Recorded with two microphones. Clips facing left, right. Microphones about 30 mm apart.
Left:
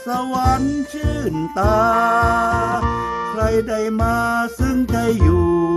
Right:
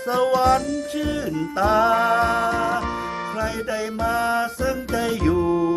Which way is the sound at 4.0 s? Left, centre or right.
Right.